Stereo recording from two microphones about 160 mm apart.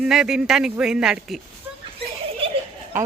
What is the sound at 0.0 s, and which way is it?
Speech, 5° right (ahead or behind).